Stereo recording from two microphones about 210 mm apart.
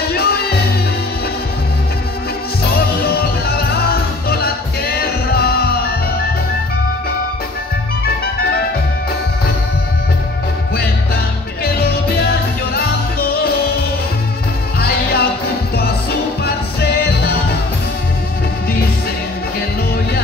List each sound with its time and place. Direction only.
0.1 s music: 50° left (ahead or behind)
3.0 s music: 45° left (ahead or behind)
11.6 s music: 50° left (ahead or behind)
14.8 s music: 50° left (ahead or behind)